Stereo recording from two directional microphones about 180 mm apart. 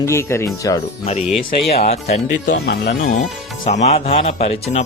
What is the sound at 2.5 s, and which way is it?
Speech, 65° left (ahead or behind).